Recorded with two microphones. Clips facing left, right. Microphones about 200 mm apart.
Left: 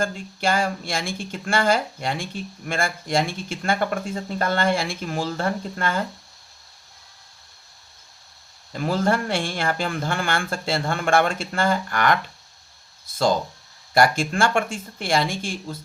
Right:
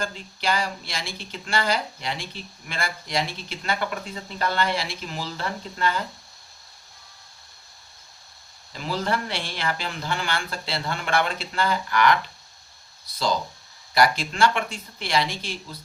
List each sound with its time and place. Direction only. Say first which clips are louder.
0.0 s speech: left 4 dB; 50° left (ahead or behind)
8.7 s speech: left 5 dB; 50° left (ahead or behind)